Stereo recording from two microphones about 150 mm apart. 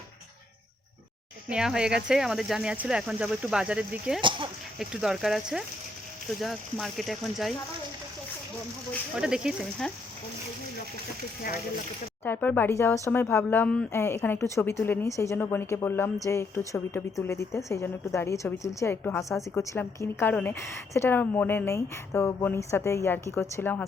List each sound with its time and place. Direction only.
1.5 s speech: 5° right (ahead or behind)
4.2 s speech: 35° right (ahead or behind)
4.8 s speech: 5° right (ahead or behind)
9.1 s speech: 5° right (ahead or behind)
12.2 s speech: 15° left (ahead or behind)